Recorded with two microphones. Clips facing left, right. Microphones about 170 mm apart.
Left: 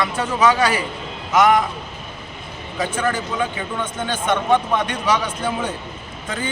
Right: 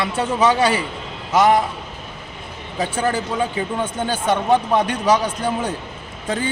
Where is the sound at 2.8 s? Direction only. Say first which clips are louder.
Right 1 dB; 30° right (ahead or behind).